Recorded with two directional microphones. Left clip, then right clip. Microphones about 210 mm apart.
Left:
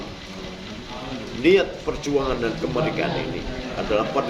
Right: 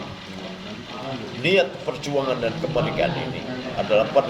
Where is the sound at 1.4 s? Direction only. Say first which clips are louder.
Left 3 dB; 25° left (ahead or behind).